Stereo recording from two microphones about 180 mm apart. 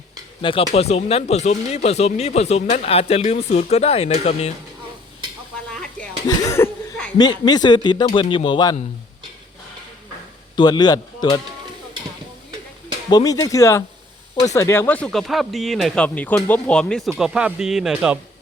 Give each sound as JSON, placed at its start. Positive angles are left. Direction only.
{"t": 0.4, "sound": "speech", "side_deg": 30}
{"t": 6.2, "sound": "speech", "side_deg": 20}
{"t": 10.5, "sound": "speech", "side_deg": 25}
{"t": 13.1, "sound": "speech", "side_deg": 20}